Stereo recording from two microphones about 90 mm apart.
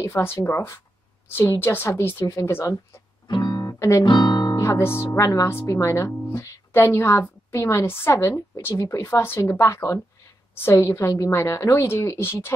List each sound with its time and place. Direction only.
0.0 s a woman's voice: 30° left (ahead or behind)
3.3 s music: 55° left (ahead or behind)
4.6 s speech: 35° left (ahead or behind)